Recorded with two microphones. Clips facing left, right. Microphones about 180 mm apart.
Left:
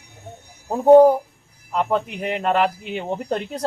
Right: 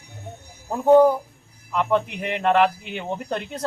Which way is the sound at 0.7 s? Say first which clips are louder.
Left 4 dB; 35° left (ahead or behind).